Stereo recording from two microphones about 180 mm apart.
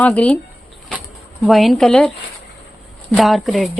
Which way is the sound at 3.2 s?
Centre (ahead or behind).